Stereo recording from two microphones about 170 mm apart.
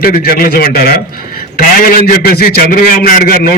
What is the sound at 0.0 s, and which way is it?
A man's voice, 60° left (ahead or behind).